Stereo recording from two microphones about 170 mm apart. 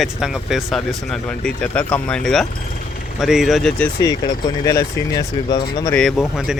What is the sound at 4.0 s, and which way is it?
Speech, 20° left (ahead or behind).